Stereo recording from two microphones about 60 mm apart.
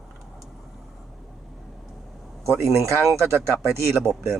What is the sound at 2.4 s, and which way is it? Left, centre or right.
Speech, right.